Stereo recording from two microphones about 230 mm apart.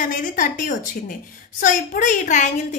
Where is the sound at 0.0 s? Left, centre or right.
Left.